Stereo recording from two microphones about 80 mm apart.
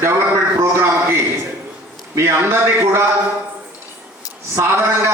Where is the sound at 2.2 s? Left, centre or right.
Right.